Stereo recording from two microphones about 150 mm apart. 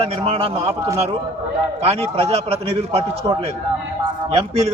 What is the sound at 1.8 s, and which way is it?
A man's voice, 40° right (ahead or behind).